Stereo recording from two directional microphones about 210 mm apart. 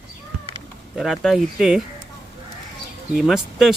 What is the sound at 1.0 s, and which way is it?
Speech, centre (ahead or behind).